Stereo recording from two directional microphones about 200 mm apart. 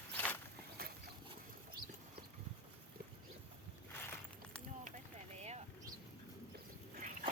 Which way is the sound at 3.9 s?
10° left (ahead or behind).